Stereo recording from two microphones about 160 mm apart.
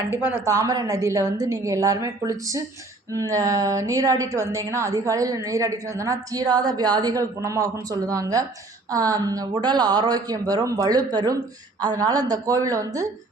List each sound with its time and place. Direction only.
0.1 s a woman's voice: 15° right (ahead or behind)